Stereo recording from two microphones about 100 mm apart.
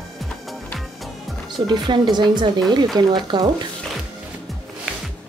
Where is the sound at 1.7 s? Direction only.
45° right (ahead or behind).